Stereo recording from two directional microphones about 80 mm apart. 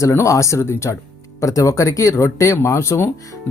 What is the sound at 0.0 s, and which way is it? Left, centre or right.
Speech, left.